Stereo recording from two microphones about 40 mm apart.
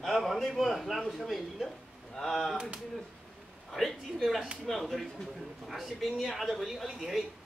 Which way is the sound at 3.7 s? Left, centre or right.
Centre.